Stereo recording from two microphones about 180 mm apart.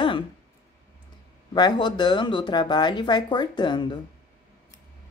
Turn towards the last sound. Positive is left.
turn(degrees=25)  # may be behind; listen again after turning